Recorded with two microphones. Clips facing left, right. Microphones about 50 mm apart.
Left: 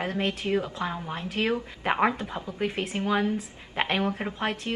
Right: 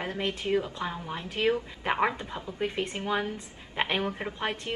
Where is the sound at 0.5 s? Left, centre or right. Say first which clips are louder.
Right 2 dB; left.